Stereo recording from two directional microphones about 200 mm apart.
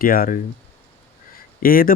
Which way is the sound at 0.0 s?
45° left (ahead or behind).